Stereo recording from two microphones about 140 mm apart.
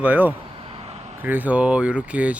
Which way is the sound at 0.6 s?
45° right (ahead or behind).